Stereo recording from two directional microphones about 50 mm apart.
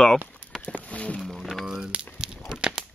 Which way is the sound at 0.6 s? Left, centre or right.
Left.